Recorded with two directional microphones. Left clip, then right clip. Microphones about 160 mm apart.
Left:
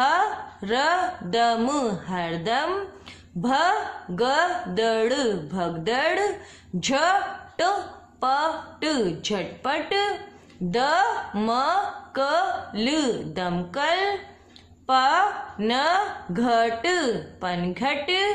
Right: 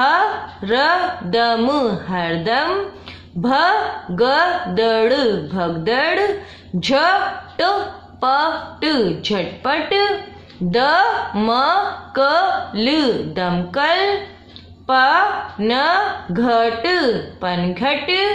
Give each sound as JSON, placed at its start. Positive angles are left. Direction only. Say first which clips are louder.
{"t": 0.0, "sound": "a woman's voice", "louder": "right 6 dB", "side_deg": 30}